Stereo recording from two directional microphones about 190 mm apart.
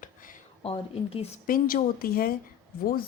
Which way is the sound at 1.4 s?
45° left (ahead or behind).